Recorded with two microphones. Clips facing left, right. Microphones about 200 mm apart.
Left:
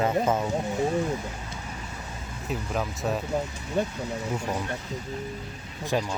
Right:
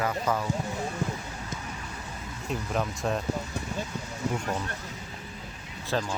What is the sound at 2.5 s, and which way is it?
Speech, centre (ahead or behind).